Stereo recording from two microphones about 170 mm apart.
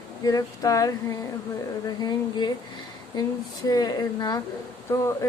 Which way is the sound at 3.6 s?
20° left (ahead or behind).